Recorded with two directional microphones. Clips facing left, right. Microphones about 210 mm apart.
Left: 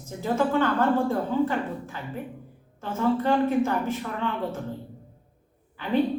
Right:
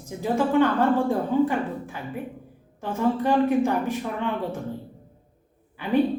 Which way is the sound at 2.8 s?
15° right (ahead or behind).